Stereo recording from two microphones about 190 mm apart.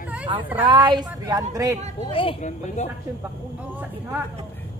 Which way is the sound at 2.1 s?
30° left (ahead or behind).